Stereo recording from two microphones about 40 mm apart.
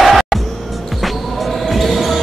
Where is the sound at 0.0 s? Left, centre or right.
Centre.